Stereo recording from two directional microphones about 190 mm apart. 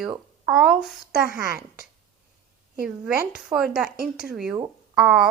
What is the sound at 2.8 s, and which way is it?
Speech, 5° right (ahead or behind).